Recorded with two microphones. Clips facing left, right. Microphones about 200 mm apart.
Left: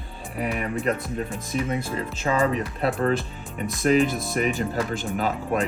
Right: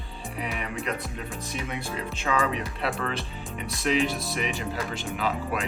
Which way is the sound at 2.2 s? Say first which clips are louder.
Left 4 dB; 40° left (ahead or behind).